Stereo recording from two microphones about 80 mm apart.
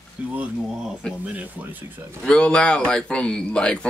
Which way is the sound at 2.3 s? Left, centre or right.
Centre.